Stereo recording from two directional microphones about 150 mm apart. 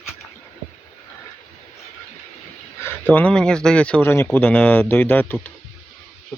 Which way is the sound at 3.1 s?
10° left (ahead or behind).